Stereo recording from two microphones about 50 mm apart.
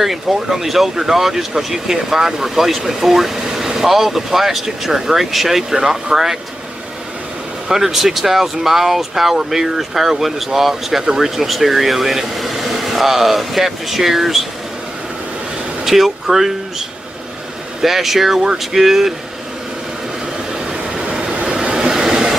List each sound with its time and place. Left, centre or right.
0.0 s speech: centre
7.6 s speech: centre
15.8 s speech: centre
17.8 s speech: centre
20.5 s vehicle: centre